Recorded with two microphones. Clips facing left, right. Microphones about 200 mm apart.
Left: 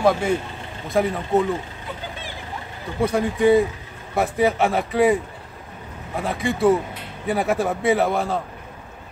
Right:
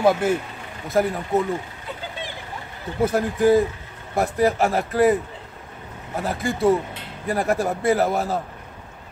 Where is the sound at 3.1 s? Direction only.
Centre (ahead or behind).